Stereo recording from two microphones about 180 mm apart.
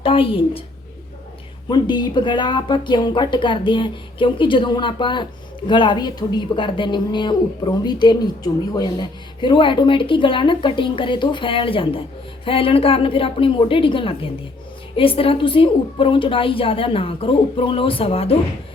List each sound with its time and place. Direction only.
0.0 s speech: 30° left (ahead or behind)
1.7 s a woman's voice: 25° left (ahead or behind)